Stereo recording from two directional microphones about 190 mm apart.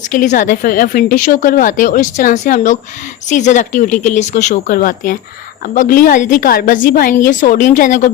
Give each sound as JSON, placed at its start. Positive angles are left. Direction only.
{"t": 0.1, "sound": "a woman's voice", "side_deg": 45}